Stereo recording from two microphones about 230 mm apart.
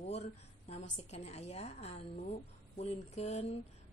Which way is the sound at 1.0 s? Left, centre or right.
Left.